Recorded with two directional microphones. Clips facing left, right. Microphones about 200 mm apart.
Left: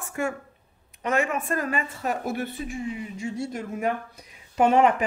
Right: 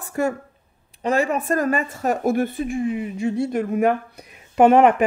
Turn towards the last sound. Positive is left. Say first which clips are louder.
# right 6 dB
turn(degrees=-60)  # may be behind; listen again after turning